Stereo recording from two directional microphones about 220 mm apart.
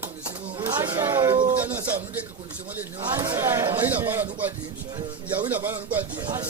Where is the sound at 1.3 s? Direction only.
20° right (ahead or behind).